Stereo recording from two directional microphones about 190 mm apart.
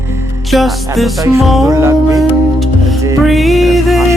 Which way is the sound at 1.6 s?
15° right (ahead or behind).